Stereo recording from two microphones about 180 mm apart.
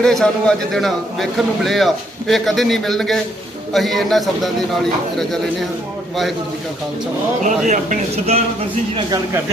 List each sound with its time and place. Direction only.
0.0 s a man's voice: 5° left (ahead or behind)
7.4 s speech: 45° right (ahead or behind)
9.0 s a man's voice: 20° right (ahead or behind)